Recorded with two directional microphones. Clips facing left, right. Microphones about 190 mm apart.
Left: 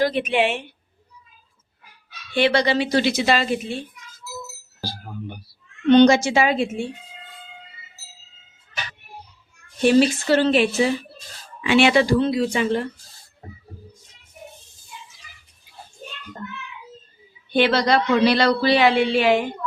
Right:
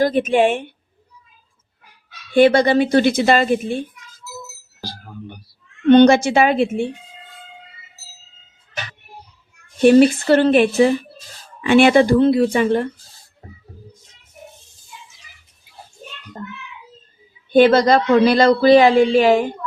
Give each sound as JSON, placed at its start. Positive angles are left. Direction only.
{"t": 0.0, "sound": "speech", "side_deg": -45}
{"t": 2.3, "sound": "speech", "side_deg": -50}
{"t": 5.9, "sound": "a woman's voice", "side_deg": -55}
{"t": 9.8, "sound": "a woman's voice", "side_deg": -55}
{"t": 17.5, "sound": "speech", "side_deg": -45}